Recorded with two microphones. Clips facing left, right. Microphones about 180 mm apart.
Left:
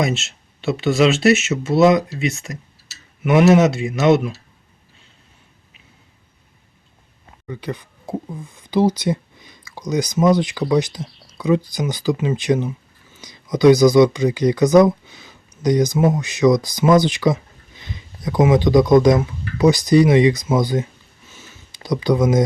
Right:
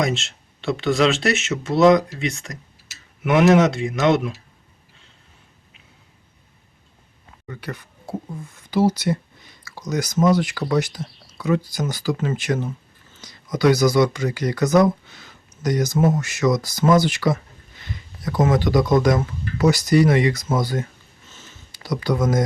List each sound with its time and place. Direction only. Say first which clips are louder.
0.0 s speech: left 2 dB; 5° left (ahead or behind)
7.4 s speech: left 5 dB; 15° left (ahead or behind)
21.2 s a sound: left 2 dB; 15° left (ahead or behind)